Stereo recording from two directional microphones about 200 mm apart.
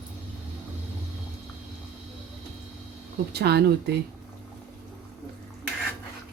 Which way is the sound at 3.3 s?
55° right (ahead or behind).